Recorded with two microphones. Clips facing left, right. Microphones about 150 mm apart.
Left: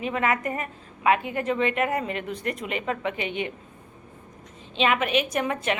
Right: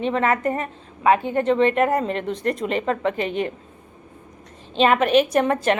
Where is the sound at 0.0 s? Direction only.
35° right (ahead or behind).